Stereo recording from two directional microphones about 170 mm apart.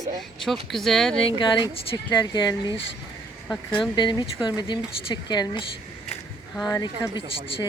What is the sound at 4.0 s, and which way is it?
Speech, 25° left (ahead or behind).